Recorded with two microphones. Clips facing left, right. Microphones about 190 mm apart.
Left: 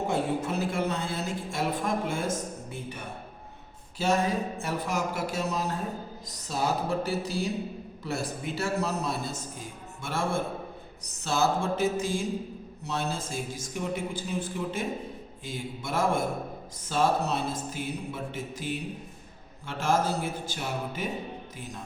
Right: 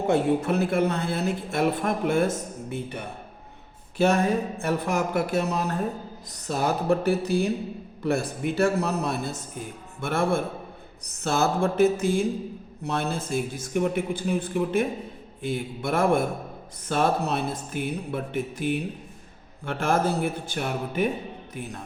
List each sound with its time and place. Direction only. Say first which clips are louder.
0.1 s speech: right 10 dB; 60° right (ahead or behind)